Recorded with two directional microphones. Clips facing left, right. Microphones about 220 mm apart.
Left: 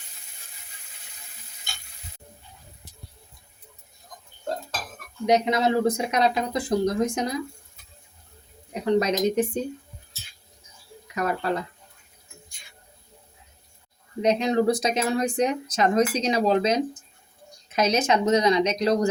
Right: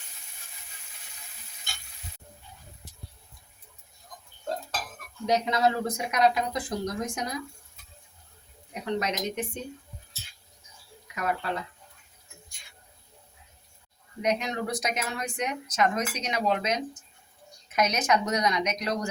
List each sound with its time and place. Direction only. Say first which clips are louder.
5.2 s speech: left 4 dB; 20° left (ahead or behind)
8.7 s speech: left 8 dB; 35° left (ahead or behind)
11.1 s speech: left 5 dB; 40° left (ahead or behind)
14.2 s speech: left 7 dB; 30° left (ahead or behind)